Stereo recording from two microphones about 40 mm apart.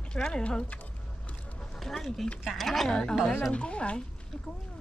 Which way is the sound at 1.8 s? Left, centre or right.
Centre.